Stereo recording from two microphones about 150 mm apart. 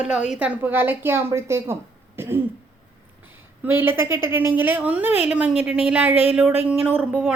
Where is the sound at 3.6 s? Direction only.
15° right (ahead or behind).